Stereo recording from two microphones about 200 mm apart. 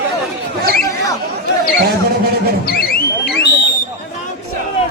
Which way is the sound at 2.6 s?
50° left (ahead or behind).